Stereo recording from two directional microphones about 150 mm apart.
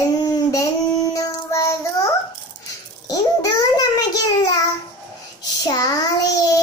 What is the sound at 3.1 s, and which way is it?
Babbling, 25° left (ahead or behind).